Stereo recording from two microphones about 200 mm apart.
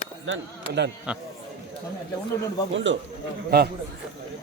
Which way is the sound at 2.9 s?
65° right (ahead or behind).